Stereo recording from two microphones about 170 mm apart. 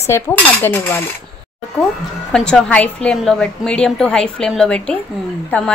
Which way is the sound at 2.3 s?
5° left (ahead or behind).